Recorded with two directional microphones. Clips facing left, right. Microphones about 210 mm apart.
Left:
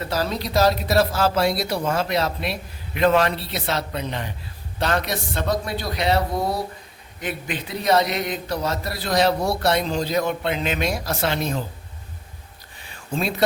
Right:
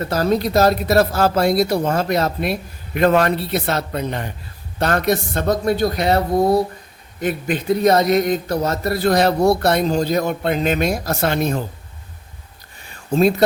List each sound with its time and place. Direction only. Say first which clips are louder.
0.0 s a man's voice: right 7 dB; 50° right (ahead or behind)